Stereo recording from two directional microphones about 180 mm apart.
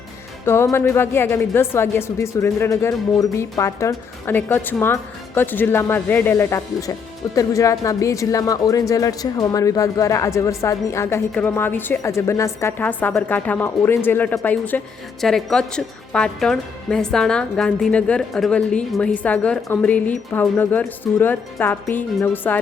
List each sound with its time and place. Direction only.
0.4 s a man's voice: 15° left (ahead or behind)